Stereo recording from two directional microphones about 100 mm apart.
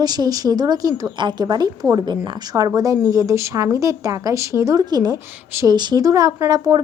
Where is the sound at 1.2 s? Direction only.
50° right (ahead or behind).